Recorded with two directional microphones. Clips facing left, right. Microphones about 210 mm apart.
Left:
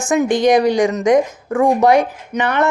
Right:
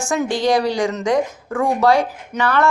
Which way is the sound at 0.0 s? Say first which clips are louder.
Left 5 dB; 20° left (ahead or behind).